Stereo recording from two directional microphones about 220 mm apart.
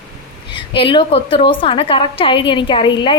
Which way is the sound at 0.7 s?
25° left (ahead or behind).